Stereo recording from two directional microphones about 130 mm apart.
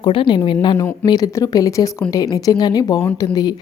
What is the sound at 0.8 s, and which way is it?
Speech, 30° left (ahead or behind).